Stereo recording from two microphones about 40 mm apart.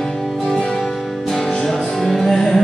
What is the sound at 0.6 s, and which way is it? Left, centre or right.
Music, left.